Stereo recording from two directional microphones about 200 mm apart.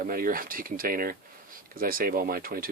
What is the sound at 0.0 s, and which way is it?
Speech, 45° right (ahead or behind).